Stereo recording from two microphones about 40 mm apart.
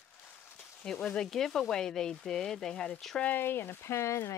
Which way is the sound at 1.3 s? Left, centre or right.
Centre.